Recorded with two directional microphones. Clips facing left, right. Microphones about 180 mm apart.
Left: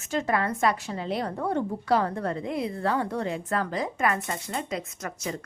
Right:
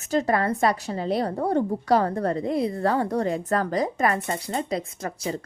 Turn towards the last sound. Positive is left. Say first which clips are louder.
# right 4 dB
turn(degrees=-30)  # may be behind; listen again after turning